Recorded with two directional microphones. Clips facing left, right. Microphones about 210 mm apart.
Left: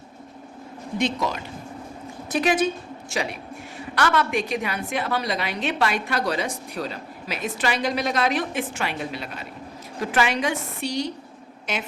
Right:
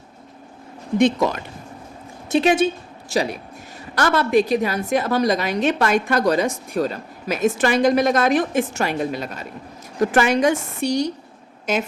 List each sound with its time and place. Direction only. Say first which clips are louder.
0.9 s a woman's voice: right 8 dB; 55° right (ahead or behind)
2.3 s a woman's voice: right 5 dB; 25° right (ahead or behind)
3.1 s a man's voice: right 6 dB; 35° right (ahead or behind)